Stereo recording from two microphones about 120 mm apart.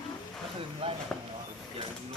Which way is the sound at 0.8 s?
50° right (ahead or behind).